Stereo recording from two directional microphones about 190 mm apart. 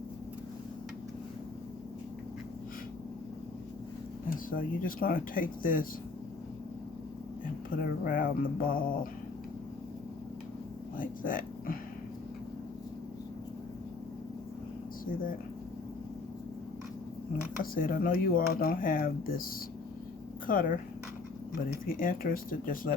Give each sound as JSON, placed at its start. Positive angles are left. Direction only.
{"t": 4.5, "sound": "speech", "side_deg": 50}
{"t": 7.8, "sound": "speech", "side_deg": 45}
{"t": 10.9, "sound": "a sound", "side_deg": 45}
{"t": 17.6, "sound": "speech", "side_deg": 50}
{"t": 20.5, "sound": "speech", "side_deg": 45}
{"t": 21.8, "sound": "speech", "side_deg": 50}